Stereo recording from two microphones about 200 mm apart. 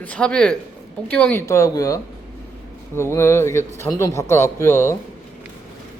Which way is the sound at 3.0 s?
15° left (ahead or behind).